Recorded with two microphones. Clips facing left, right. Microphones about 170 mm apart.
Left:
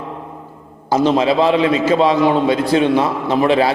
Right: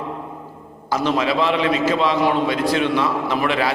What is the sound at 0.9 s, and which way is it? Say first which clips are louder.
A man's voice: left 6 dB; 30° left (ahead or behind).